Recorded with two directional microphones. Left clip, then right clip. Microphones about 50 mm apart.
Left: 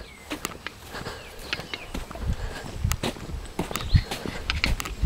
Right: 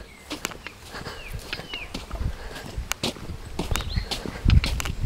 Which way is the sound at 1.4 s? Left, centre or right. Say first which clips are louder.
Left 2 dB; left.